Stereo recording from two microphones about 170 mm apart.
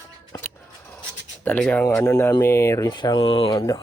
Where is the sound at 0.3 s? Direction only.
20° left (ahead or behind).